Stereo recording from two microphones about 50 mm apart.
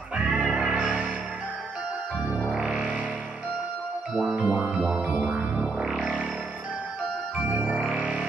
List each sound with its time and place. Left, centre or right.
0.1 s music: right
2.3 s music: centre
4.1 s music: centre
4.4 s music: right
4.8 s music: centre
7.4 s music: right